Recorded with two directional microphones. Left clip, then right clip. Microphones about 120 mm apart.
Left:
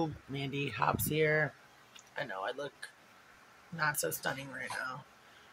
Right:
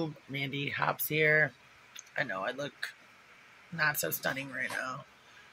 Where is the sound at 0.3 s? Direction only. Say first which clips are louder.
Right 3 dB; 15° left (ahead or behind).